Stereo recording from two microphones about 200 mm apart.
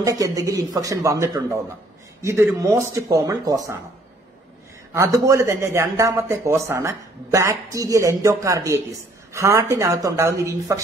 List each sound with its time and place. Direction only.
0.0 s speech: 15° right (ahead or behind)
4.9 s speech: 15° right (ahead or behind)